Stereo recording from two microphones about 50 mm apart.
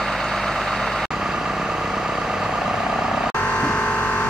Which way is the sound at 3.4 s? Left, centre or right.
Left.